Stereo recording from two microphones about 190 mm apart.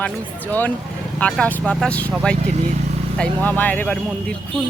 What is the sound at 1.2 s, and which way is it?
Speech, 5° left (ahead or behind).